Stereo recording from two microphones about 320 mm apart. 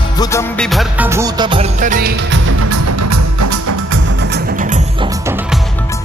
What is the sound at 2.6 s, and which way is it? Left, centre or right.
Music, right.